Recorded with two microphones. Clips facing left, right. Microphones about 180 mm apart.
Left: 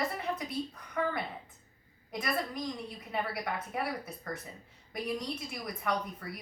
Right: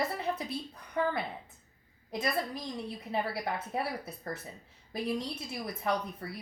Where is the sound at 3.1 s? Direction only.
25° right (ahead or behind).